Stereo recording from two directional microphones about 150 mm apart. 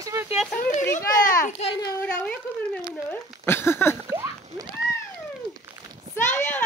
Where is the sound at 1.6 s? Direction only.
35° left (ahead or behind).